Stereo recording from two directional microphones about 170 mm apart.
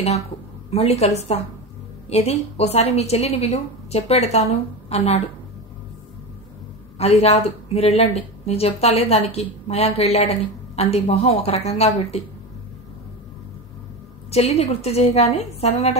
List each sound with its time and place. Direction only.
0.7 s speech: 40° left (ahead or behind)
7.0 s speech: 35° left (ahead or behind)
14.3 s speech: 40° left (ahead or behind)